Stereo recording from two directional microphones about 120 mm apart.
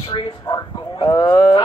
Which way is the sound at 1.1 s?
30° left (ahead or behind).